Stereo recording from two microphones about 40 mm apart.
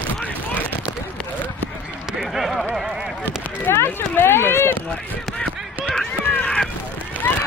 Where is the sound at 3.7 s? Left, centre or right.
Left.